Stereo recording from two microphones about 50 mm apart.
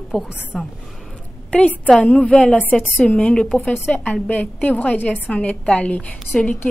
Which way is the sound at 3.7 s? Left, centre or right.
Left.